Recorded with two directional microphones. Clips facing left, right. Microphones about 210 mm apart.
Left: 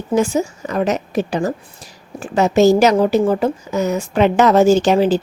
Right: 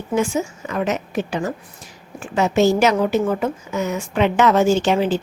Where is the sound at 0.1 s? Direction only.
35° left (ahead or behind).